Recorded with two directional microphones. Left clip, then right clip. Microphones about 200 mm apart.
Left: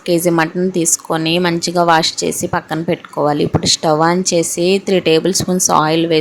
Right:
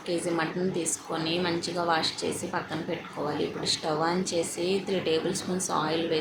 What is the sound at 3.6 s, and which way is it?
Speech, 50° left (ahead or behind).